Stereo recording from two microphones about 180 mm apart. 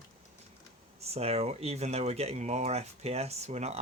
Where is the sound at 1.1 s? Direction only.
35° right (ahead or behind).